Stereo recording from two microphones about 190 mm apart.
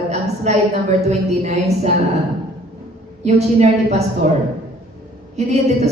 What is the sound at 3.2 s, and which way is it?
A woman's voice, 35° right (ahead or behind).